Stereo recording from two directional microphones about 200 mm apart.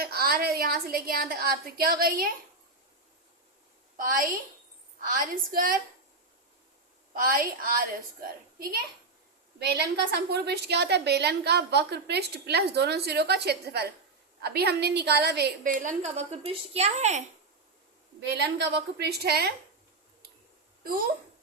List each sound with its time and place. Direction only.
0.0 s a woman's voice: 50° right (ahead or behind)
4.9 s a woman's voice: 45° right (ahead or behind)
7.1 s a woman's voice: 45° right (ahead or behind)
9.6 s a woman's voice: 55° right (ahead or behind); by 17.2 s 35° right (ahead or behind)
18.2 s a woman's voice: 60° right (ahead or behind)